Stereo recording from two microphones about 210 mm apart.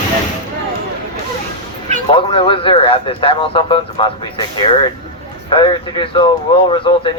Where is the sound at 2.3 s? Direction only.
25° left (ahead or behind).